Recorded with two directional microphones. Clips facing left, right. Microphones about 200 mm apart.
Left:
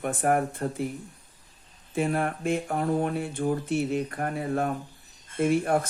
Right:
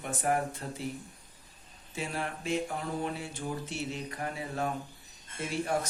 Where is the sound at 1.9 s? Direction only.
55° left (ahead or behind).